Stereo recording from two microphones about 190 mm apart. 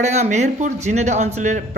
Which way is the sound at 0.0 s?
35° right (ahead or behind).